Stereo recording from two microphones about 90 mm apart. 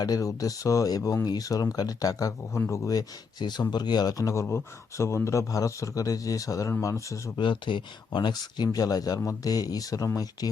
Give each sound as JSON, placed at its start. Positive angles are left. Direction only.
{"t": 0.0, "sound": "a man's voice", "side_deg": 40}
{"t": 7.3, "sound": "speech", "side_deg": 60}